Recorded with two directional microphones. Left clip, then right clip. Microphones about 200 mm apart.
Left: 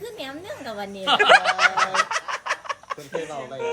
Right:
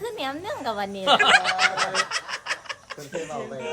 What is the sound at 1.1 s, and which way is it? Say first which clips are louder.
Speech: even; 50° right (ahead or behind).